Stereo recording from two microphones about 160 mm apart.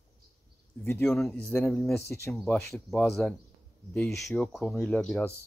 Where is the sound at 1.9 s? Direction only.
15° left (ahead or behind).